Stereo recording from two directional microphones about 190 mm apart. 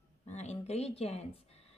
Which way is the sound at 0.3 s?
35° left (ahead or behind).